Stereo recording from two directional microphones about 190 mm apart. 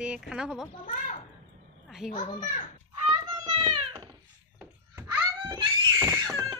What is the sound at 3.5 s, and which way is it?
Cat, 25° right (ahead or behind).